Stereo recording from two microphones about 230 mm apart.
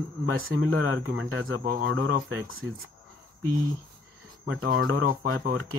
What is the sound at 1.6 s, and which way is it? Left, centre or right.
Speech, right.